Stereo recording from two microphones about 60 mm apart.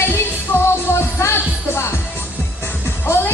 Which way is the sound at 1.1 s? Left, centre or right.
Left.